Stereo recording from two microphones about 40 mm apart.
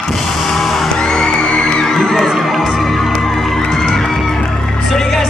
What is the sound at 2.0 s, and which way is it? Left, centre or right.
Music, centre.